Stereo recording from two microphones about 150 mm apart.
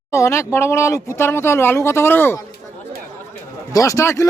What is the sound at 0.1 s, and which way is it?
Speech, 20° left (ahead or behind).